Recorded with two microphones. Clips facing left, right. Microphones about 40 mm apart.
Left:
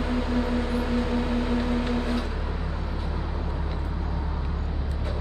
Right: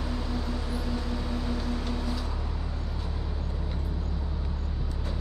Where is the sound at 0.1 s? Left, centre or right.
Left.